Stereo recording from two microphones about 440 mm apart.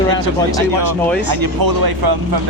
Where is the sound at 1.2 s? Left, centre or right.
Right.